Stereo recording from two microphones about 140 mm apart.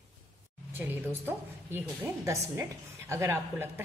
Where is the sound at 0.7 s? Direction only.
15° right (ahead or behind).